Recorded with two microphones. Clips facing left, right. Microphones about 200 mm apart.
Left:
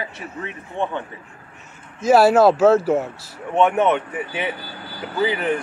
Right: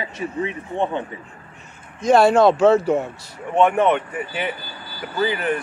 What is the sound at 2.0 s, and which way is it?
Speech, 5° left (ahead or behind).